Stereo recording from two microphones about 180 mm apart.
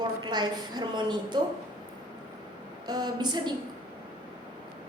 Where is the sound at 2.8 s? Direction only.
20° right (ahead or behind).